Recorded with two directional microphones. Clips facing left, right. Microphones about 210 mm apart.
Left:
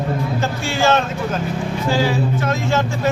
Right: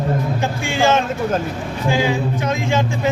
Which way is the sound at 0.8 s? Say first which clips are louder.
Right 1 dB; 15° right (ahead or behind).